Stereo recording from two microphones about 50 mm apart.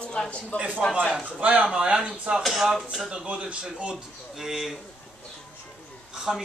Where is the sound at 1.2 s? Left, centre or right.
Right.